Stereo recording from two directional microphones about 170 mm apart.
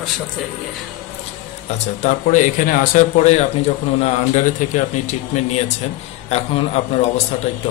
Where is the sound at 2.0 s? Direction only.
45° left (ahead or behind).